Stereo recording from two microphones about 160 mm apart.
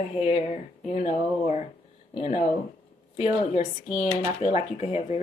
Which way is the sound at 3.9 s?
45° left (ahead or behind).